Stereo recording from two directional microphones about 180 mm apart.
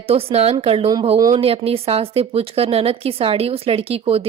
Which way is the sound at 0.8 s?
20° right (ahead or behind).